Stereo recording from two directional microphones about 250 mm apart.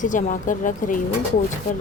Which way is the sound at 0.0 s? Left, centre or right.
Left.